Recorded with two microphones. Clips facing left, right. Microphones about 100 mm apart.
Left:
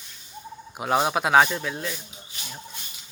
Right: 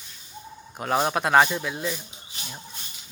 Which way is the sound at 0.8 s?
5° left (ahead or behind).